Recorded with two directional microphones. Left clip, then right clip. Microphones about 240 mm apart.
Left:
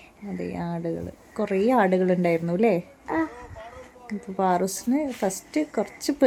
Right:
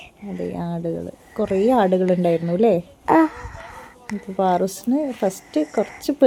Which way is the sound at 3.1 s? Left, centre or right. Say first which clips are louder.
Right 12 dB; right.